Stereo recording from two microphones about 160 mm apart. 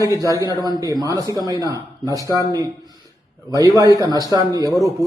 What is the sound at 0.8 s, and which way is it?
Speech, 20° right (ahead or behind).